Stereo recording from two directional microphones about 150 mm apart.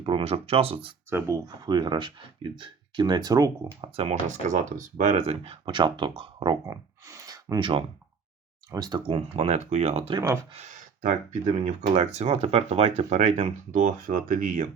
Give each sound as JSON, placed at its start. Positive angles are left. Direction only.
{"t": 0.0, "sound": "speech", "side_deg": -35}
{"t": 1.5, "sound": "speech", "side_deg": -30}
{"t": 3.9, "sound": "speech", "side_deg": -50}
{"t": 8.7, "sound": "speech", "side_deg": -25}
{"t": 9.0, "sound": "speech", "side_deg": -40}
{"t": 13.7, "sound": "speech", "side_deg": -60}